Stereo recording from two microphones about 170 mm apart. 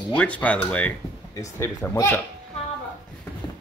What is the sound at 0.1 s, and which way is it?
Speech, 10° left (ahead or behind).